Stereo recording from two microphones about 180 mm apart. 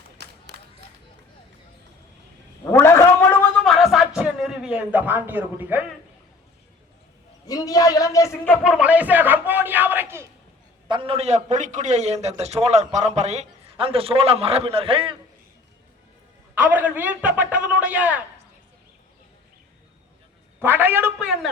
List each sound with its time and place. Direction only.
0.2 s run: 70° right (ahead or behind)
2.7 s a sound: 15° left (ahead or behind)
3.7 s a sound: centre (ahead or behind)
7.4 s a man's voice: 20° left (ahead or behind)
8.6 s speech: 5° right (ahead or behind)
10.8 s a man's voice: 30° right (ahead or behind)
16.6 s speech: 10° right (ahead or behind)
20.6 s speech: 10° right (ahead or behind)